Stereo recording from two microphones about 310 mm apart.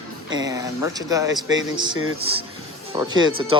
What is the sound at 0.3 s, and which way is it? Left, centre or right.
Speech, centre.